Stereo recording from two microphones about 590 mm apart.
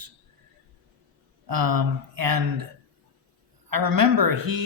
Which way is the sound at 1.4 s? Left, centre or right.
Right.